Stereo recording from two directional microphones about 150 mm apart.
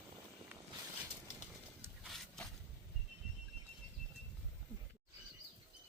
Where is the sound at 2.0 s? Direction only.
Centre (ahead or behind).